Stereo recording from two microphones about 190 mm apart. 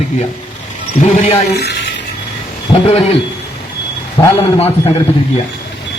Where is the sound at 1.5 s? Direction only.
60° left (ahead or behind).